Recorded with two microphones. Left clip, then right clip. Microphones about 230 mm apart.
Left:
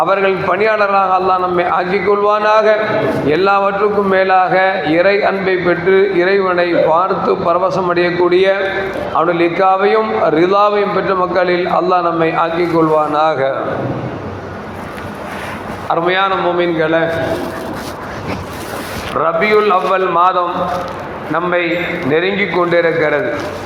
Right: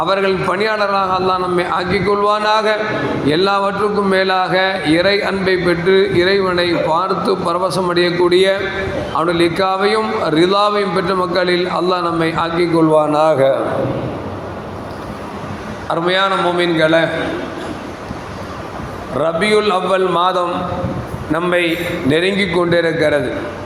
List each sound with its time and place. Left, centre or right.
0.0 s a man's voice: right
15.9 s a man's voice: right
19.2 s a man's voice: right